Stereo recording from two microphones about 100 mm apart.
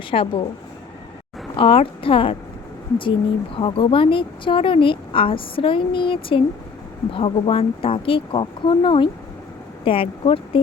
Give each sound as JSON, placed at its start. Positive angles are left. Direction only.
{"t": 0.1, "sound": "a woman's voice", "side_deg": 65}
{"t": 1.5, "sound": "a woman's voice", "side_deg": 70}
{"t": 3.5, "sound": "a woman's voice", "side_deg": 65}